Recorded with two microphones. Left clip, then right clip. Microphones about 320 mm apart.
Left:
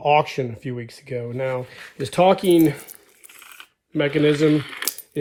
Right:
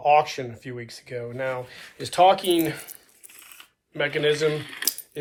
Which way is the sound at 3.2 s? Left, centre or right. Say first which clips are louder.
Left 5 dB; centre.